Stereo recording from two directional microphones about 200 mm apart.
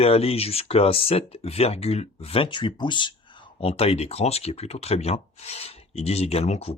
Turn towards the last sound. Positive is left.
turn(degrees=30)  # may be behind; listen again after turning